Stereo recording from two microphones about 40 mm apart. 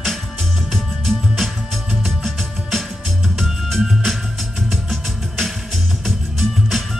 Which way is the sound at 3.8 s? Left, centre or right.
Centre.